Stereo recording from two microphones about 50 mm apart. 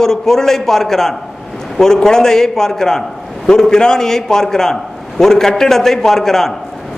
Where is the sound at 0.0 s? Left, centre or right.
Centre.